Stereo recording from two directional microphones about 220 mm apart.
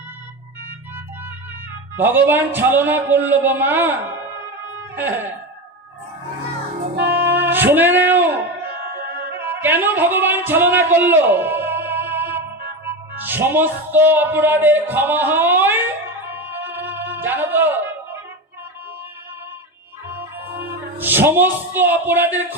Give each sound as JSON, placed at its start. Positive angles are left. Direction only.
{"t": 2.0, "sound": "a man's voice", "side_deg": -10}
{"t": 4.9, "sound": "a man's voice", "side_deg": -10}
{"t": 6.9, "sound": "music", "side_deg": -50}
{"t": 7.3, "sound": "music", "side_deg": -10}
{"t": 9.4, "sound": "music", "side_deg": -10}
{"t": 12.8, "sound": "speech", "side_deg": -10}
{"t": 16.3, "sound": "music", "side_deg": -10}
{"t": 21.0, "sound": "a man's voice", "side_deg": -10}